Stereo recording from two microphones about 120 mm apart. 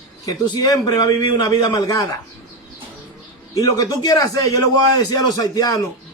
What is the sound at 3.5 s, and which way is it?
A man's voice, 30° left (ahead or behind).